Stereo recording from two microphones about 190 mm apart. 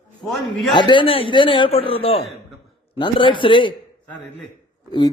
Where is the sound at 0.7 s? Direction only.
25° left (ahead or behind).